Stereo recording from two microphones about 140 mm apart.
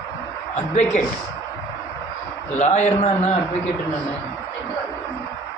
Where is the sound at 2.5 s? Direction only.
55° left (ahead or behind).